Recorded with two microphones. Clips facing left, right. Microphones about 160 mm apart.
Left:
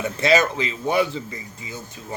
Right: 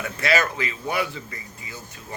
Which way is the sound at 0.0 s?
25° left (ahead or behind).